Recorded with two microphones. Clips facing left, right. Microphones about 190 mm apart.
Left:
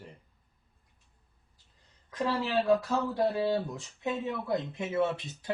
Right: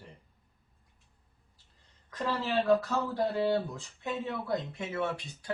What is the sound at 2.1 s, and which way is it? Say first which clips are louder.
Speech: left 2 dB; 10° left (ahead or behind).